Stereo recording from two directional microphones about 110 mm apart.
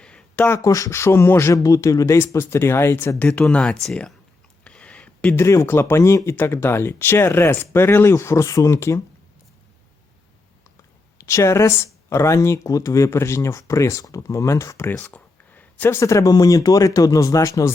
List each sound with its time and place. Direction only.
0.0 s a sound: 10° left (ahead or behind)
0.4 s speech: 25° left (ahead or behind)
3.2 s speech: 10° left (ahead or behind)
4.6 s a sound: 10° left (ahead or behind)
5.4 s speech: 25° left (ahead or behind)
11.2 s speech: 25° left (ahead or behind)
16.0 s speech: 30° left (ahead or behind)